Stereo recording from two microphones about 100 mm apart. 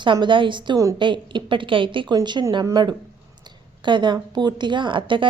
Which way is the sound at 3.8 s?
50° right (ahead or behind).